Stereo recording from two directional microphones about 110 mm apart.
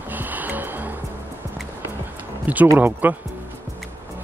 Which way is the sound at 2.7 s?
20° right (ahead or behind).